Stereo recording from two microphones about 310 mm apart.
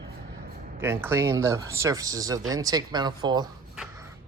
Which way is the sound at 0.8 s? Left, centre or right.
Centre.